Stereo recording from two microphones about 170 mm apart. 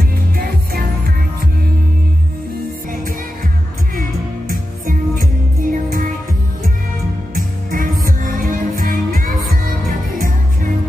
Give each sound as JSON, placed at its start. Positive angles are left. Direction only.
{"t": 4.5, "sound": "music", "side_deg": -50}
{"t": 7.3, "sound": "music", "side_deg": -55}